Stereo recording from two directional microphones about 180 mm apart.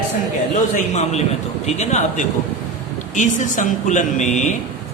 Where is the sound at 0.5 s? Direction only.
40° left (ahead or behind).